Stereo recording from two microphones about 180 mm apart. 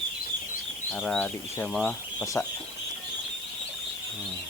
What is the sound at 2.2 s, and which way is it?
Speech, 15° left (ahead or behind).